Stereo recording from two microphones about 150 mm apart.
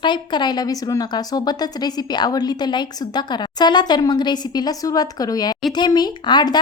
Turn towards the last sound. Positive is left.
turn(degrees=30)  # may be behind; listen again after turning